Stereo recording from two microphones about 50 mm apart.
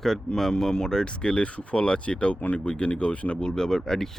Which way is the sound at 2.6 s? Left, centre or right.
Left.